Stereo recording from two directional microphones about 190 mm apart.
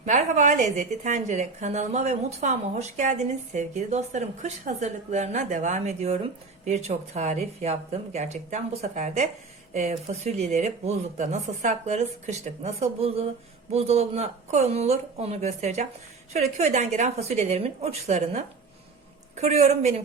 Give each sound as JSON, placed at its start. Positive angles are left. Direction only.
{"t": 0.0, "sound": "a woman's voice", "side_deg": -40}